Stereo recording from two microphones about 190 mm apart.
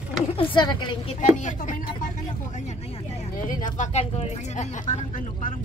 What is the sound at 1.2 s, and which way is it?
Speech, 40° left (ahead or behind).